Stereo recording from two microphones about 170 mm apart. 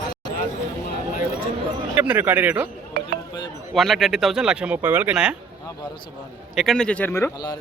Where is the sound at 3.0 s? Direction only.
85° right.